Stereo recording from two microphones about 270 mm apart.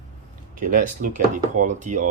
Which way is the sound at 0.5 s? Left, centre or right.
Right.